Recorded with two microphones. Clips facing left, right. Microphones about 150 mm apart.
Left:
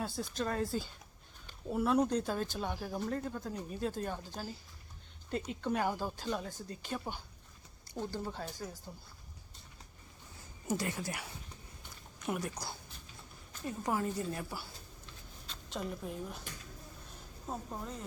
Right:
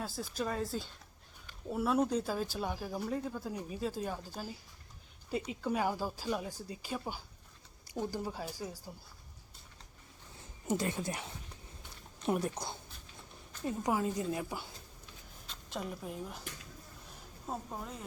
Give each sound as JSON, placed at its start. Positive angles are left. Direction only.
{"t": 0.0, "sound": "a woman's voice", "side_deg": 0}
{"t": 10.7, "sound": "a woman's voice", "side_deg": -20}
{"t": 15.7, "sound": "speech", "side_deg": 0}
{"t": 17.4, "sound": "speech", "side_deg": -5}